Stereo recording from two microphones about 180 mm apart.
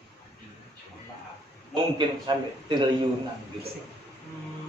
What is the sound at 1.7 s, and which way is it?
A man's voice, 25° right (ahead or behind).